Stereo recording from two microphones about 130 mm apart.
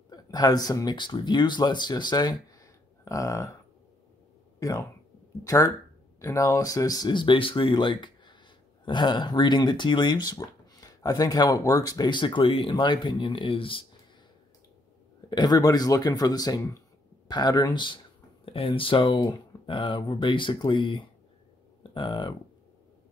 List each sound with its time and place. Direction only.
0.1 s speech: 30° left (ahead or behind)
4.6 s speech: 25° left (ahead or behind); by 13.8 s 45° left (ahead or behind)
15.2 s speech: 35° left (ahead or behind)
18.4 s speech: 45° left (ahead or behind)